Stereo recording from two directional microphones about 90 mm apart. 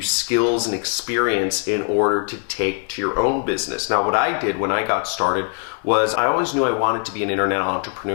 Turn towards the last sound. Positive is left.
turn(degrees=15)  # may be behind; listen again after turning